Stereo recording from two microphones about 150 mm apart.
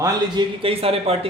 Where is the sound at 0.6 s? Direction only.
40° right (ahead or behind).